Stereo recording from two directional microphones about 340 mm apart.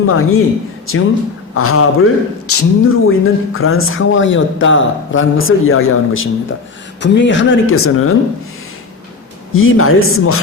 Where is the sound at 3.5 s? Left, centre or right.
Left.